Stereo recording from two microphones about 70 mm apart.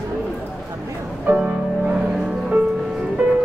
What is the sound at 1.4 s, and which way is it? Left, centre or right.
Music, centre.